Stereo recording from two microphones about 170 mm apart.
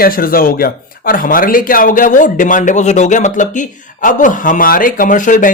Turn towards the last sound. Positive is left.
turn(degrees=50)  # may be behind; listen again after turning